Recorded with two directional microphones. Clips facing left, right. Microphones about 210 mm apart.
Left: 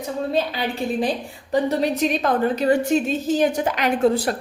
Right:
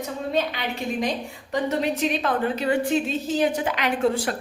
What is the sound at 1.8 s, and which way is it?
A woman's voice, 40° left (ahead or behind).